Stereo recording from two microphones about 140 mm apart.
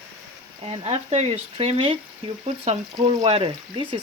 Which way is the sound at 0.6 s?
45° right (ahead or behind).